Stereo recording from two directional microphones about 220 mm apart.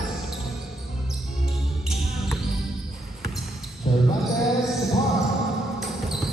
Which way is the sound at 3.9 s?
20° left (ahead or behind).